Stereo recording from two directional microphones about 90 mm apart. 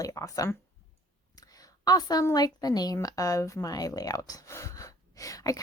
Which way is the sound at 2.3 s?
50° left (ahead or behind).